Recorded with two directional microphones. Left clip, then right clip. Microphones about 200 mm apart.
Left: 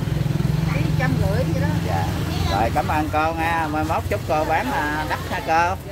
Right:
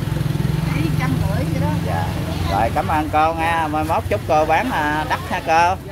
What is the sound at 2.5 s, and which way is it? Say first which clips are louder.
Speech: right 2 dB; 20° right (ahead or behind).